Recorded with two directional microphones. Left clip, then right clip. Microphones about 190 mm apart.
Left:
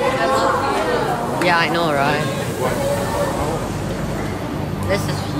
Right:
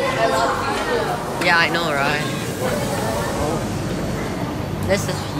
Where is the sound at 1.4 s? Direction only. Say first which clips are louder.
Even; 10° left (ahead or behind).